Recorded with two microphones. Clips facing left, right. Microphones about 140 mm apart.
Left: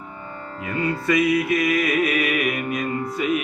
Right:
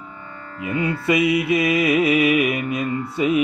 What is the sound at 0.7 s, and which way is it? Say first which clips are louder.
Mantra: right 2 dB; 20° right (ahead or behind).